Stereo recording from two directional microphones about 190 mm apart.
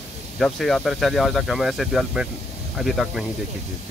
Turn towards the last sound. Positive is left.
turn(degrees=0)  # may be behind; listen again after turning